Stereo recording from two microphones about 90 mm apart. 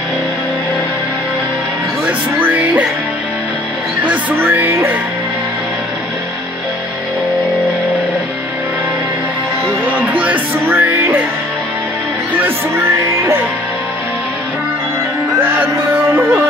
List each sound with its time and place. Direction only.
2.0 s music: 20° right (ahead or behind)
4.0 s music: 20° right (ahead or behind)
9.8 s music: 20° right (ahead or behind)